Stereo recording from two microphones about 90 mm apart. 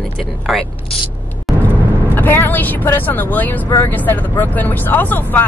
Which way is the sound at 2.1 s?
20° left (ahead or behind).